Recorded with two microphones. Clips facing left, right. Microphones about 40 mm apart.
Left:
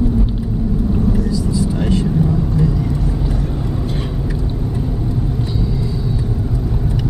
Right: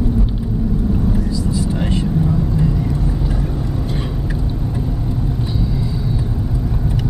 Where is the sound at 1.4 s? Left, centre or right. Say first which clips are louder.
Left 1 dB; right.